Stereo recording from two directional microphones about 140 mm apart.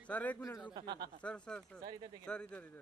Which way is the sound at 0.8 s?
30° right (ahead or behind).